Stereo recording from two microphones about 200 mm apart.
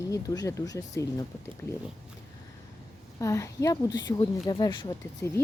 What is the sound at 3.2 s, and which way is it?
Speech, 15° left (ahead or behind).